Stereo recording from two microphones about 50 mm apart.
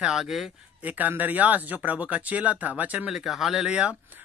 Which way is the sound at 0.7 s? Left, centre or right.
Right.